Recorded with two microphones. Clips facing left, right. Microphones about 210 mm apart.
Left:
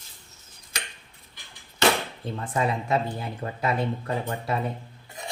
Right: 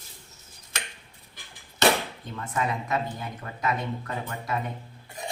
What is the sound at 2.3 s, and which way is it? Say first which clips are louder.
Speech: left 3 dB; 30° left (ahead or behind).